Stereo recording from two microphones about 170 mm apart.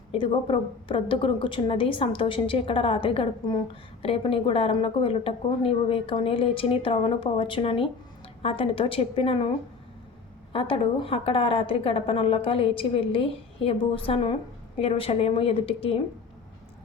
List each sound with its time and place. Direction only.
0.1 s a woman's voice: 30° left (ahead or behind)
10.5 s a woman's voice: 30° left (ahead or behind)